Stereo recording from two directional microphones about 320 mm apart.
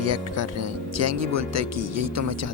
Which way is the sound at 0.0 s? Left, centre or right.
Right.